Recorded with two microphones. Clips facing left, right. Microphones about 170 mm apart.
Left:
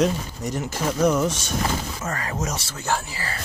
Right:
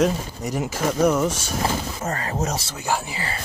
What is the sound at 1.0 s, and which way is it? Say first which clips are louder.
Speech: right 1 dB; 5° right (ahead or behind).